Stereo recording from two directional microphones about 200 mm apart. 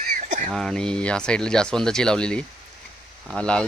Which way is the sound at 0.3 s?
40° right (ahead or behind).